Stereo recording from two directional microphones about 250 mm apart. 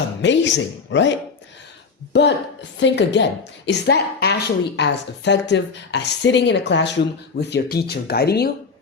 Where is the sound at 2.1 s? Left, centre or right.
Left.